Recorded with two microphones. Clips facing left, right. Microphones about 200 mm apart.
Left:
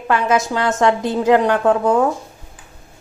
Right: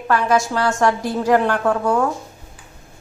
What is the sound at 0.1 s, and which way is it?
A woman's voice, 20° left (ahead or behind).